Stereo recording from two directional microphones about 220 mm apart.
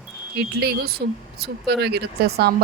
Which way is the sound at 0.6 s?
45° right (ahead or behind).